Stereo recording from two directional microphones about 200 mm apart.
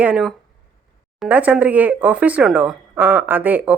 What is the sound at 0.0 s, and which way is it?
Speech, 5° right (ahead or behind).